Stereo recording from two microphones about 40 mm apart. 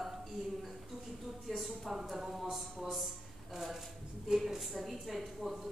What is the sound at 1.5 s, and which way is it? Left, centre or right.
A man's voice, centre.